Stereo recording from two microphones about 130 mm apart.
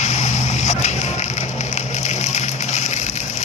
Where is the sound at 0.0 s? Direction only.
60° left (ahead or behind).